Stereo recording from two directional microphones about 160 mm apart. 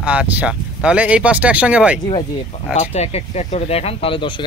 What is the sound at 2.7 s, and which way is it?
Speech, 40° left (ahead or behind).